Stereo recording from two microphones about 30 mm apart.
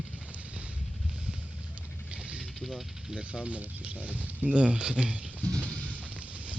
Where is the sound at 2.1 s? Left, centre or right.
Right.